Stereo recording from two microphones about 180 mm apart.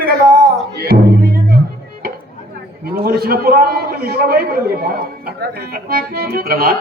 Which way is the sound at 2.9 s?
55° right (ahead or behind).